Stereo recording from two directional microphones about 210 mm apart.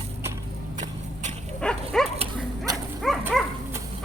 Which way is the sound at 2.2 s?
20° right (ahead or behind).